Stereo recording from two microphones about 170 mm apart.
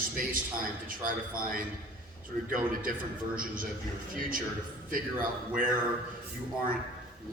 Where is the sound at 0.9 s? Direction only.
55° right (ahead or behind).